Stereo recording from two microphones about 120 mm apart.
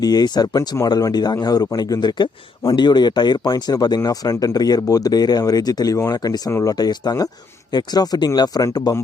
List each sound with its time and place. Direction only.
0.0 s speech: 35° left (ahead or behind)